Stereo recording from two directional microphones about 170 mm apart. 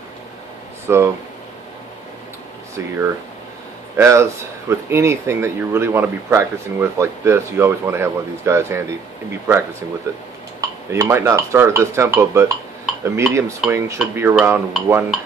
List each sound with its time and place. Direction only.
0.8 s speech: 15° right (ahead or behind)
3.9 s speech: 15° right (ahead or behind)
10.9 s speech: 15° right (ahead or behind)